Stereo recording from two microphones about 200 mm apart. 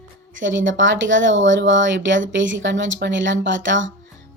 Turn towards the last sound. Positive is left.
turn(degrees=-65)  # may be behind; listen again after turning